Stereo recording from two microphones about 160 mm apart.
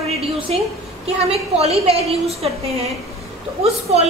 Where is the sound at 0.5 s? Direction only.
40° right (ahead or behind).